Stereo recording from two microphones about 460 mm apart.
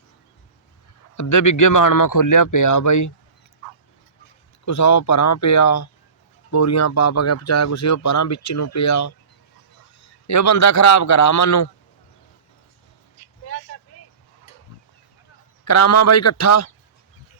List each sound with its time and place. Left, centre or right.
1.1 s speech: left
4.6 s speech: left
15.6 s speech: left